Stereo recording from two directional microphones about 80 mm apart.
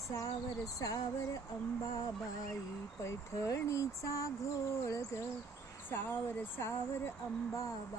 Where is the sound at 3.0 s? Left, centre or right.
Left.